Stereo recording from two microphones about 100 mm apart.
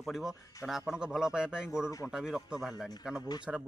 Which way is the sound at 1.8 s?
30° left (ahead or behind).